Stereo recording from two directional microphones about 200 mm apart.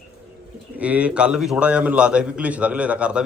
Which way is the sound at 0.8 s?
5° right (ahead or behind).